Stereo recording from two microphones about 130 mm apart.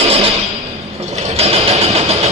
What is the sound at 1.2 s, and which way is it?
Vehicle, 55° right (ahead or behind).